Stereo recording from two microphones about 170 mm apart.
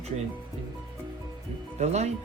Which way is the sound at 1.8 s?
40° right (ahead or behind).